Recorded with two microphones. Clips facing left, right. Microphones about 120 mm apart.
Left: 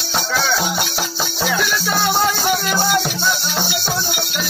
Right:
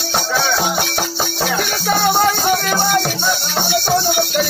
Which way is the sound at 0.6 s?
45° right (ahead or behind).